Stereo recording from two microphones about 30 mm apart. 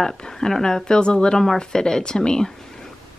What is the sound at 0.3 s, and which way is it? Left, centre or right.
Speech, centre.